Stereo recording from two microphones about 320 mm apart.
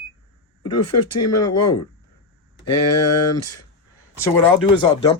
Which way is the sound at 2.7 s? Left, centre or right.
Left.